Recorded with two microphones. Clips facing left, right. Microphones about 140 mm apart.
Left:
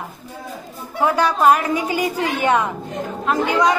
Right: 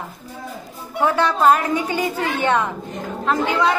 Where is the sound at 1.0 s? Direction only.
10° left (ahead or behind).